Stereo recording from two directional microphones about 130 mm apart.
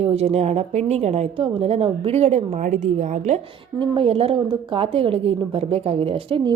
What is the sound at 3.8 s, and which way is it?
A woman's voice, 45° right (ahead or behind).